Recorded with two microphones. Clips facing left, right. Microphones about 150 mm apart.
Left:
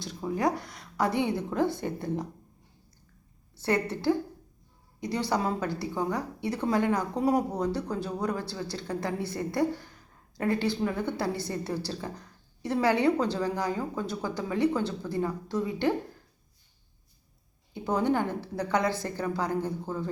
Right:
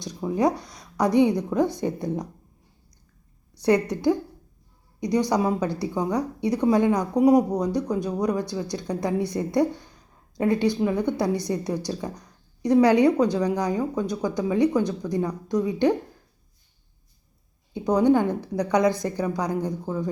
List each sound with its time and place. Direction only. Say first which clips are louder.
0.0 s speech: right 5 dB; 20° right (ahead or behind)
3.5 s speech: right 7 dB; 15° right (ahead or behind)
17.7 s speech: right 7 dB; 15° right (ahead or behind)